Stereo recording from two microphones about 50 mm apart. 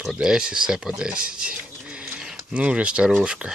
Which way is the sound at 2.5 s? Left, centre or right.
Right.